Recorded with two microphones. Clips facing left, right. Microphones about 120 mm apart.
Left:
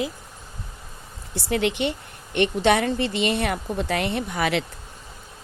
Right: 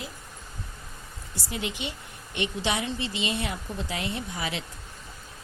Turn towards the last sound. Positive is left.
turn(degrees=70)  # may be behind; listen again after turning